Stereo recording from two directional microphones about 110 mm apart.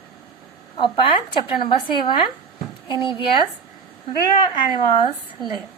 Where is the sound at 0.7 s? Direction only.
45° left (ahead or behind).